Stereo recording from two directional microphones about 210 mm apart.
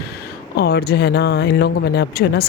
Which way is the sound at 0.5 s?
50° left (ahead or behind).